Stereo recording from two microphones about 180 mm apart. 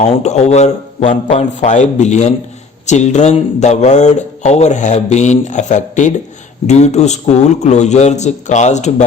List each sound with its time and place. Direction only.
0.0 s speech: 35° left (ahead or behind)